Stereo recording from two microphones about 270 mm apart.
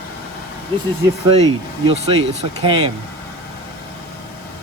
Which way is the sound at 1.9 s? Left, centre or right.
Right.